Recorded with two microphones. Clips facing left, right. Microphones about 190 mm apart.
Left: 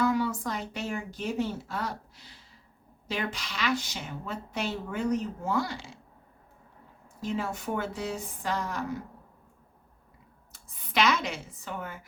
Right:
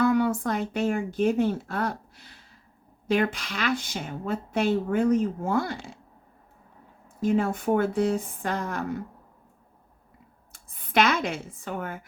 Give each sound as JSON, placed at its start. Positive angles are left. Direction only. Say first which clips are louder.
{"t": 0.0, "sound": "a woman's voice", "louder": "right 5 dB", "side_deg": -55}
{"t": 7.2, "sound": "a woman's voice", "louder": "right 8 dB", "side_deg": -50}
{"t": 10.5, "sound": "speech", "louder": "right 6 dB", "side_deg": -55}